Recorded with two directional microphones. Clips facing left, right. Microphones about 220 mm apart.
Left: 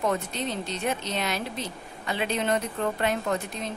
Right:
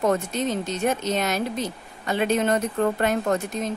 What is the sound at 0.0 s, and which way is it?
Speech, 45° right (ahead or behind).